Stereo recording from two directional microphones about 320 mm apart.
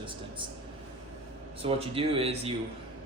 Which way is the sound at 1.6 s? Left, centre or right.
Centre.